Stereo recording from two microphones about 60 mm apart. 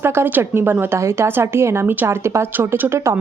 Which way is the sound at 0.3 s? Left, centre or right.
Right.